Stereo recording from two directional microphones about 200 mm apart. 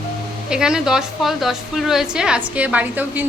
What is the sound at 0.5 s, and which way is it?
A woman's voice, 5° right (ahead or behind).